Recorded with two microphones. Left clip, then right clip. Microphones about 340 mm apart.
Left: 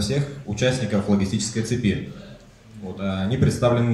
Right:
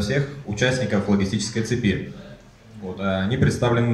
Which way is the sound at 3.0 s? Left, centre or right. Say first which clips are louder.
Right 2 dB; centre.